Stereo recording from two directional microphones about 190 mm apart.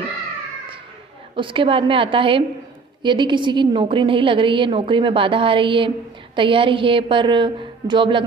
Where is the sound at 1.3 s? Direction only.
25° right (ahead or behind).